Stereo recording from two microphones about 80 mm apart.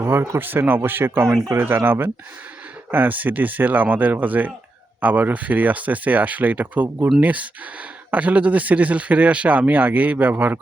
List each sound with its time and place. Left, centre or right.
0.0 s speech: right